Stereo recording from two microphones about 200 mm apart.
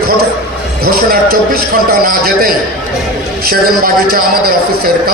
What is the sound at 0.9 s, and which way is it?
A man's voice, 50° right (ahead or behind).